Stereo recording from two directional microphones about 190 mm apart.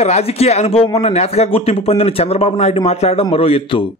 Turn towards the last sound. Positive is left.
turn(degrees=30)  # may be behind; listen again after turning